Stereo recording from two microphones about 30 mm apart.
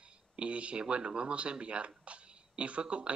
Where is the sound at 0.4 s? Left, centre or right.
Right.